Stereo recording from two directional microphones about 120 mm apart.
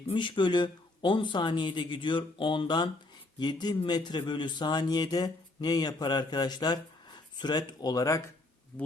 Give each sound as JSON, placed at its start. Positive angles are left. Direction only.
{"t": 0.1, "sound": "speech", "side_deg": 45}